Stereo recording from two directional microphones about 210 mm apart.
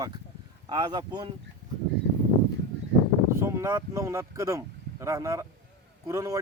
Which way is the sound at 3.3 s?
15° right (ahead or behind).